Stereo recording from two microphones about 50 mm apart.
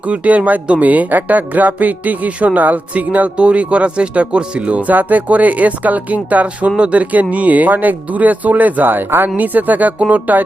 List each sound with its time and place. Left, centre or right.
0.1 s speech: right